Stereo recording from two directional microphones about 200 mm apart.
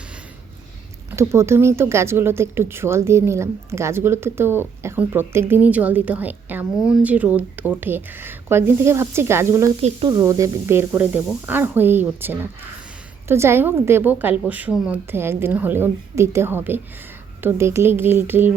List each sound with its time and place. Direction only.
1.1 s speech: 15° right (ahead or behind)